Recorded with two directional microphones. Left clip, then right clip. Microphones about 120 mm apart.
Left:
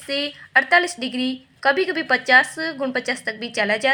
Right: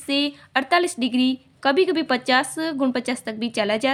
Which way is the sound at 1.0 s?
45° right (ahead or behind).